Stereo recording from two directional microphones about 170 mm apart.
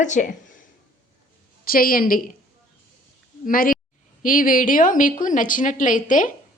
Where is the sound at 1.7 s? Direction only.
60° left (ahead or behind).